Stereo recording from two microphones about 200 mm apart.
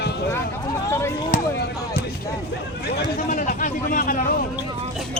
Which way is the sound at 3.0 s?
45° left (ahead or behind).